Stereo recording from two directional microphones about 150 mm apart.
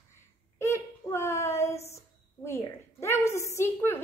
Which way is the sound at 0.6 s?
15° left (ahead or behind).